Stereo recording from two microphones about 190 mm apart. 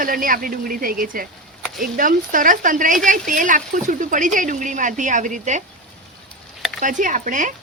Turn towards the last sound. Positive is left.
turn(degrees=-45)  # may be behind; listen again after turning